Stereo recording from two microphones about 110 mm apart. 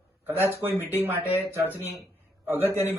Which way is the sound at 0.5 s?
20° right (ahead or behind).